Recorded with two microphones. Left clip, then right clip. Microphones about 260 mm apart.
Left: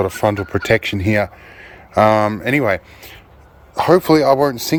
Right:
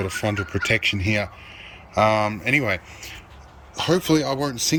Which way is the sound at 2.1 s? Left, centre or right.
Left.